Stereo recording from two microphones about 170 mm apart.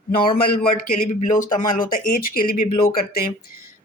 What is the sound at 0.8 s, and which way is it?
Speech, 50° left (ahead or behind).